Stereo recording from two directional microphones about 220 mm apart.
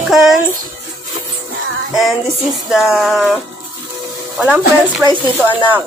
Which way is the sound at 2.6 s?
Centre (ahead or behind).